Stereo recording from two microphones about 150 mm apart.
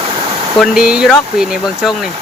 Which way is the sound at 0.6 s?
5° right (ahead or behind).